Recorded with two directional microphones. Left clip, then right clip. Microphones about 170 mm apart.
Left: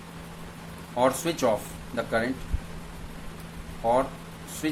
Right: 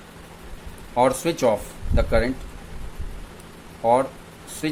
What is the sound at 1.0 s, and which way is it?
Speech, 40° right (ahead or behind).